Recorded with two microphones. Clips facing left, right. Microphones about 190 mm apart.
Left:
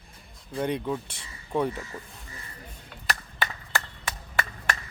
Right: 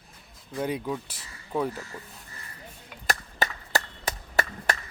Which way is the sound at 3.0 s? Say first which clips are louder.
Right 2 dB; 40° right (ahead or behind).